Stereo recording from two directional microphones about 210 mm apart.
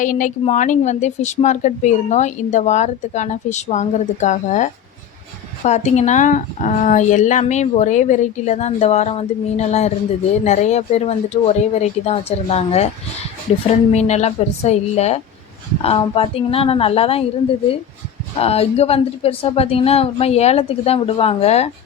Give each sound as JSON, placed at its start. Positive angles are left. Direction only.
{"t": 0.0, "sound": "a woman's voice", "side_deg": 40}
{"t": 13.9, "sound": "a woman's voice", "side_deg": 30}
{"t": 18.3, "sound": "speech", "side_deg": 30}